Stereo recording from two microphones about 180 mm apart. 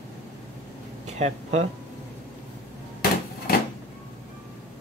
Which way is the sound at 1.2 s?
35° right (ahead or behind).